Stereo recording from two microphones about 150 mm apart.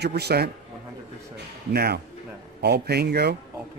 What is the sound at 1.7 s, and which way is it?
Speech, 90° right.